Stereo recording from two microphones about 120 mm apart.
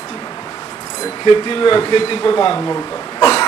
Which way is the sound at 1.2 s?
40° left (ahead or behind).